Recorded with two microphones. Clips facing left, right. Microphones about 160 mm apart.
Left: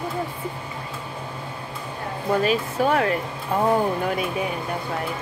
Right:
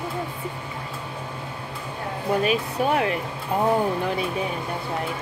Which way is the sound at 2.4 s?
35° left (ahead or behind).